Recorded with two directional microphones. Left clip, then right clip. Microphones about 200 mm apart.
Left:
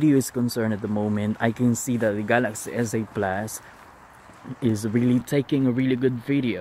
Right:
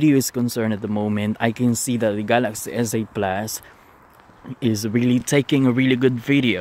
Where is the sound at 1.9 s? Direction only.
35° right (ahead or behind).